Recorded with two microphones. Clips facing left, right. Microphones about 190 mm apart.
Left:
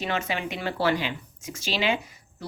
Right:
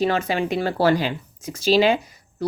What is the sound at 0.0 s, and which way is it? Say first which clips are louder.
Speech: right 8 dB; 35° right (ahead or behind).